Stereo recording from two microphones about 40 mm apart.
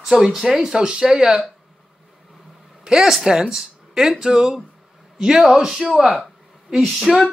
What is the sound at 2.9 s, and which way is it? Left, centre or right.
Speech, centre.